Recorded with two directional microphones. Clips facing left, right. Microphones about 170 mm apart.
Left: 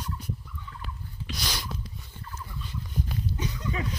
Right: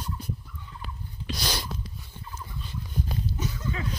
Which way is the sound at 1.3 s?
35° right (ahead or behind).